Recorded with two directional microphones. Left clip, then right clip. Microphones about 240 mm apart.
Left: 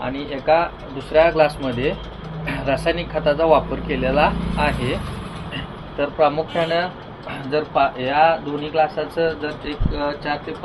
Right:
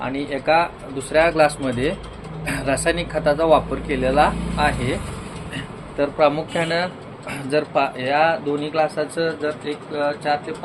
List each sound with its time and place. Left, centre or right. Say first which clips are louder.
0.0 s speech: even; right
6.0 s speech: even; right